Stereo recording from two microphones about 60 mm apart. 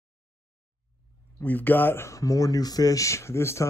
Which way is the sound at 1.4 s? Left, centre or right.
Left.